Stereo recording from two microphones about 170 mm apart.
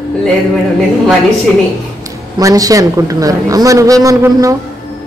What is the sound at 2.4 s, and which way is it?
A woman's voice, 20° right (ahead or behind).